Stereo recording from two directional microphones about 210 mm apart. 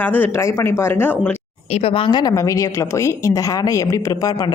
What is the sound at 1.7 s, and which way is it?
A woman's voice, 30° left (ahead or behind).